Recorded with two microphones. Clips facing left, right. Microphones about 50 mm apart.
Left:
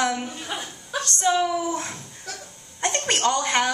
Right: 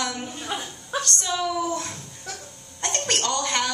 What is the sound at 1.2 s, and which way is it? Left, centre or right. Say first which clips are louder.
A woman's voice: left 7 dB; left.